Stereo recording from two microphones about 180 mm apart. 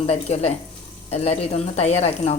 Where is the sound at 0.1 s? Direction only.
35° left (ahead or behind).